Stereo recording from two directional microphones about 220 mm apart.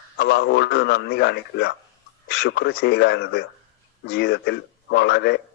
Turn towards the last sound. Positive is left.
turn(degrees=50)  # may be behind; listen again after turning